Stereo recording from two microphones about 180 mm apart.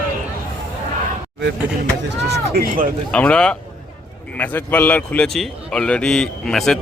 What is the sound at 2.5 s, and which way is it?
Speech, 50° right (ahead or behind).